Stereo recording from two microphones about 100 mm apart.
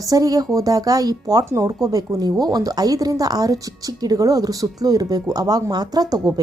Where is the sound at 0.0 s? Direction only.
35° right (ahead or behind).